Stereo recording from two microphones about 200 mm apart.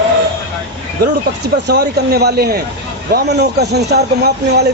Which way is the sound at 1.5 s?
55° right (ahead or behind).